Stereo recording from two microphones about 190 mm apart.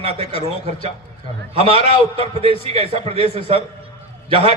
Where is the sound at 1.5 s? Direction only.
30° right (ahead or behind).